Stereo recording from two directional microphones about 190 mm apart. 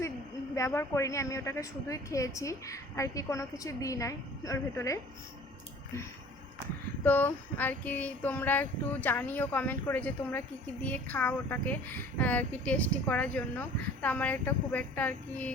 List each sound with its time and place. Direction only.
0.5 s speech: 15° left (ahead or behind)
7.0 s speech: 10° left (ahead or behind)